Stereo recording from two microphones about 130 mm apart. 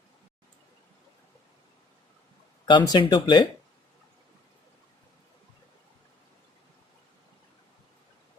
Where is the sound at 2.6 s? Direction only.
30° left (ahead or behind).